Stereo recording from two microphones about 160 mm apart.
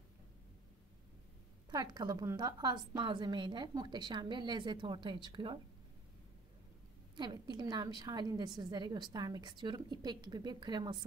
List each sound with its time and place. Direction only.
1.7 s a woman's voice: 25° right (ahead or behind)
7.2 s a woman's voice: 25° right (ahead or behind)